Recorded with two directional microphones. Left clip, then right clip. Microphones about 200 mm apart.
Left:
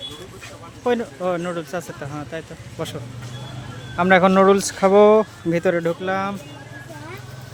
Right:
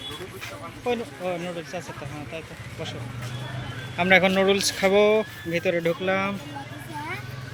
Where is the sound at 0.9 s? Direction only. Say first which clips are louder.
Left 6 dB; 40° left (ahead or behind).